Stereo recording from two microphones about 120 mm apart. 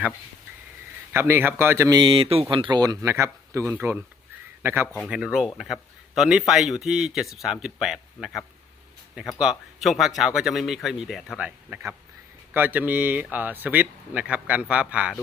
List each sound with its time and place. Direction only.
1.1 s speech: 20° right (ahead or behind)
1.9 s speech: 40° right (ahead or behind); by 4.9 s 20° right (ahead or behind)
5.0 s speech: 5° right (ahead or behind)